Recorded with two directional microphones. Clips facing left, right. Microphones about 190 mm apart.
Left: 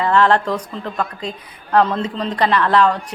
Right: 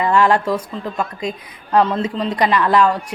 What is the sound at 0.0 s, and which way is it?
Speech, 10° right (ahead or behind).